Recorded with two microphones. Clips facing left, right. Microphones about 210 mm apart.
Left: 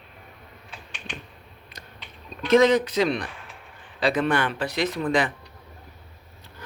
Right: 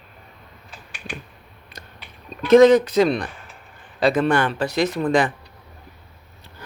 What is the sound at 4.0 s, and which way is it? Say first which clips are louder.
Speech: right 4 dB; 45° right (ahead or behind).